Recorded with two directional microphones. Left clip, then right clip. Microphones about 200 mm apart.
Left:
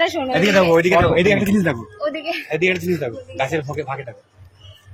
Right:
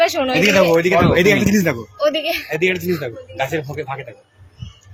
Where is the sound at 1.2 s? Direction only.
20° right (ahead or behind).